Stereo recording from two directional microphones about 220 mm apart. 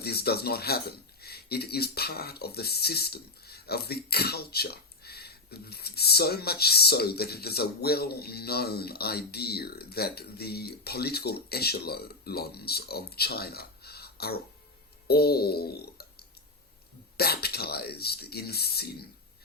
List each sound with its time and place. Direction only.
0.0 s speech: 45° left (ahead or behind)